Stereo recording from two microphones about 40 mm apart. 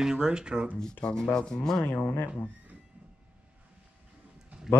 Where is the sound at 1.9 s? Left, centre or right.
Left.